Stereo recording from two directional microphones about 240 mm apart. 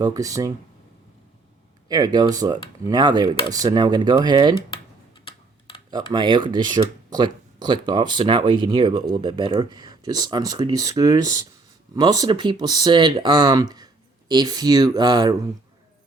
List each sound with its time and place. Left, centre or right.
0.0 s speech: centre
1.9 s speech: centre
5.2 s a sound: left
5.9 s speech: centre